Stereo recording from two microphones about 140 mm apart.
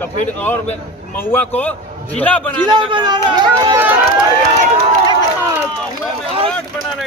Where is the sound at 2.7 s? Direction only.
35° right (ahead or behind).